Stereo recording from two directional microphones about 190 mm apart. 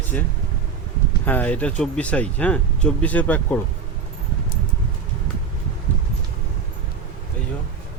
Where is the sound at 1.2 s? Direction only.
10° left (ahead or behind).